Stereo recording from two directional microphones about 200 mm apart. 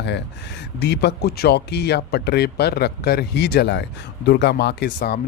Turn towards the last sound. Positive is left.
turn(degrees=55)  # may be behind; listen again after turning